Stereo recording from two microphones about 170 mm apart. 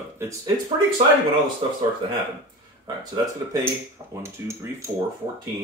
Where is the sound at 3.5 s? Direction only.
15° right (ahead or behind).